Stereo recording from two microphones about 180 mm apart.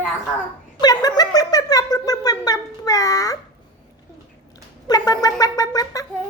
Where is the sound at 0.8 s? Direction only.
20° left (ahead or behind).